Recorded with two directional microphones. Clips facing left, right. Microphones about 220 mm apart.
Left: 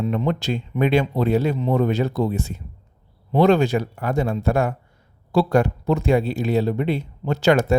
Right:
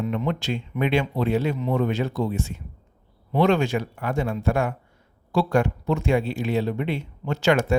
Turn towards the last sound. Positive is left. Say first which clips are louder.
# left 3 dB
turn(degrees=35)  # may be behind; listen again after turning